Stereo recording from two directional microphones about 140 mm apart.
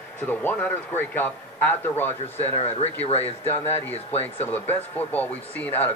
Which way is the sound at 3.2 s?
15° left (ahead or behind).